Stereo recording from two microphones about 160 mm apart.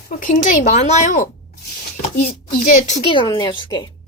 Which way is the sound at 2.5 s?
55° left (ahead or behind).